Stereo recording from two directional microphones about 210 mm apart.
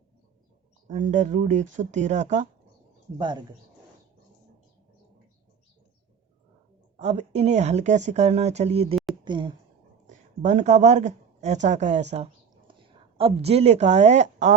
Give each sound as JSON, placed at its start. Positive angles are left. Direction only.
{"t": 0.9, "sound": "speech", "side_deg": -35}
{"t": 3.2, "sound": "speech", "side_deg": -20}
{"t": 6.9, "sound": "speech", "side_deg": -30}
{"t": 10.1, "sound": "a woman's voice", "side_deg": -35}
{"t": 12.1, "sound": "a sound", "side_deg": -30}
{"t": 13.1, "sound": "speech", "side_deg": -25}